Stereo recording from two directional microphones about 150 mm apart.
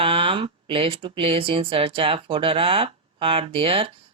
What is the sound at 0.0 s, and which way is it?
Speech, 35° right (ahead or behind).